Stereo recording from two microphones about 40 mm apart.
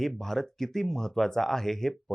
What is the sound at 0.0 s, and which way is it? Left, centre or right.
Speech, centre.